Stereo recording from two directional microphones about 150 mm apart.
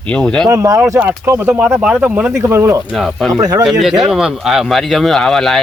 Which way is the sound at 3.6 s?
Centre (ahead or behind).